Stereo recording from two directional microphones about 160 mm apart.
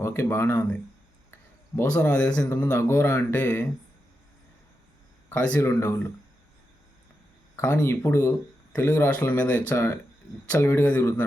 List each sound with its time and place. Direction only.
0.0 s speech: 15° left (ahead or behind)
5.3 s speech: 10° left (ahead or behind)
7.5 s speech: 15° left (ahead or behind)